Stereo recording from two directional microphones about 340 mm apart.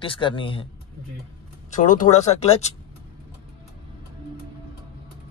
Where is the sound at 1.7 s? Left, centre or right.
Left.